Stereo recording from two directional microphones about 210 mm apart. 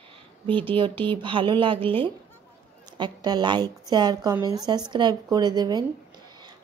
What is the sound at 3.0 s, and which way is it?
Speech, 20° right (ahead or behind).